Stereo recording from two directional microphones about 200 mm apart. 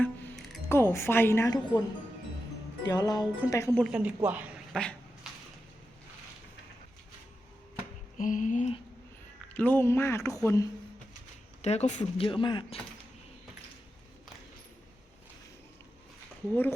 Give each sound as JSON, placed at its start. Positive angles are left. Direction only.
{"t": 0.0, "sound": "music", "side_deg": 0}
{"t": 0.7, "sound": "speech", "side_deg": 10}
{"t": 2.8, "sound": "speech", "side_deg": 20}
{"t": 3.8, "sound": "a woman's voice", "side_deg": -5}
{"t": 4.7, "sound": "dog", "side_deg": 5}
{"t": 8.2, "sound": "music", "side_deg": 40}
{"t": 9.6, "sound": "speech", "side_deg": 10}
{"t": 11.6, "sound": "speech", "side_deg": 35}
{"t": 16.5, "sound": "speech", "side_deg": 10}